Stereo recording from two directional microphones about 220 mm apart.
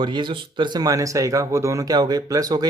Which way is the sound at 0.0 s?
20° right (ahead or behind).